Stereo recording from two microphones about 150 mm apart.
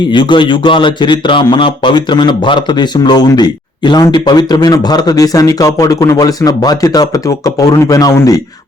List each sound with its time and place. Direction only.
0.1 s a man's voice: 30° left (ahead or behind)